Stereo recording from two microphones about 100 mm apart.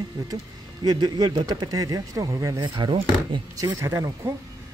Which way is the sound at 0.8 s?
45° right (ahead or behind).